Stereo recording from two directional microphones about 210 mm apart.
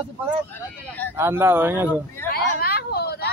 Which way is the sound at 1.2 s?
10° right (ahead or behind).